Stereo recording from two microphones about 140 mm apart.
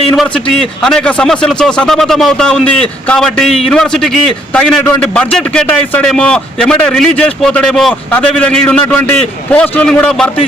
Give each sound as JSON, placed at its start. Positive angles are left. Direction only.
{"t": 0.8, "sound": "a man's voice", "side_deg": 5}